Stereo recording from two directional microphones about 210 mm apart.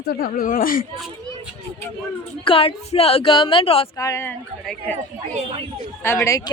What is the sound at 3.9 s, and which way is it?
Speech, 15° left (ahead or behind).